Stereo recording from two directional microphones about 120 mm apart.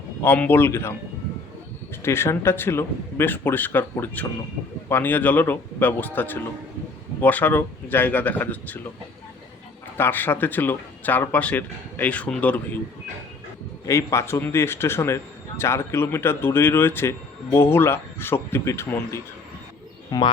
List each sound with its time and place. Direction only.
0.2 s speech: 15° left (ahead or behind)
2.0 s a man's voice: 20° left (ahead or behind)
10.0 s speech: 15° left (ahead or behind)
13.8 s a man's voice: 25° left (ahead or behind)
20.1 s speech: 35° left (ahead or behind)